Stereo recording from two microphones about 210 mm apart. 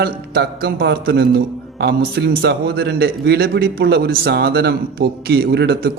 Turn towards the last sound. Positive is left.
turn(degrees=-50)  # may be behind; listen again after turning